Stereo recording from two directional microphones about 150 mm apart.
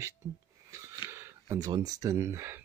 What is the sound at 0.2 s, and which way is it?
Speech, 25° right (ahead or behind).